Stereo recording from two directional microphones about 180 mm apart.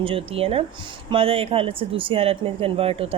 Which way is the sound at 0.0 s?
30° right (ahead or behind).